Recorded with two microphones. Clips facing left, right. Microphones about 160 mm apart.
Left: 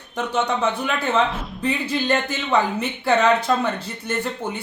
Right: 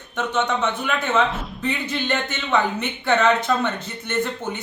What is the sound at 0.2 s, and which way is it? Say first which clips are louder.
Speech: even; 35° left (ahead or behind).